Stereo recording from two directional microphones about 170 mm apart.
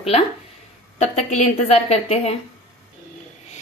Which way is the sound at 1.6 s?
40° left (ahead or behind).